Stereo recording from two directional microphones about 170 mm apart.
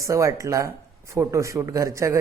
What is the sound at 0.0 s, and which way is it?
A man's voice, 20° right (ahead or behind).